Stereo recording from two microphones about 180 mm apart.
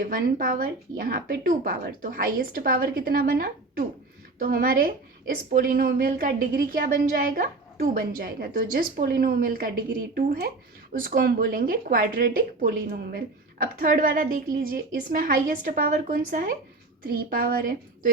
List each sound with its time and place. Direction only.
0.0 s a woman's voice: 50° right (ahead or behind)